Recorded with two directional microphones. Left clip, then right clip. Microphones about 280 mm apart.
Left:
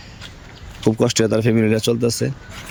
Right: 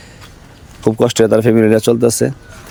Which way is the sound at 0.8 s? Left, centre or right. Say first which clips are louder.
Right 5 dB; centre.